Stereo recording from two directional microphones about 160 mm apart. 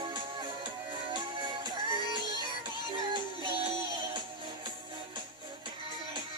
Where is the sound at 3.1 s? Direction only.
30° right (ahead or behind).